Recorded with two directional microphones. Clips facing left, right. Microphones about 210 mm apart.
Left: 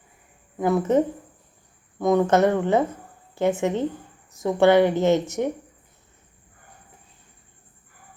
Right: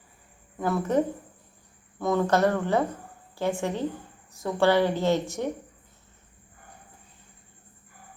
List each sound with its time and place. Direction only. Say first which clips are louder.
0.6 s a woman's voice: left 5 dB; 20° left (ahead or behind)